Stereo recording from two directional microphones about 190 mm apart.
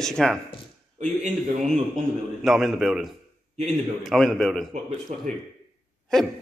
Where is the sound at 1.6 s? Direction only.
Centre (ahead or behind).